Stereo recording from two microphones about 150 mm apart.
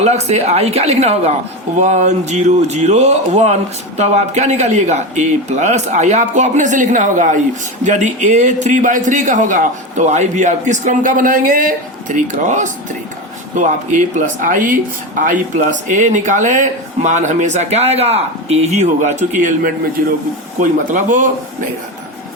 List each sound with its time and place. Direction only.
0.0 s speech: 45° right (ahead or behind)